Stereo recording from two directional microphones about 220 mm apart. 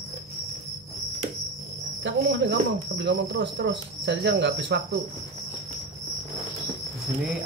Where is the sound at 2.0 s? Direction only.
50° right (ahead or behind).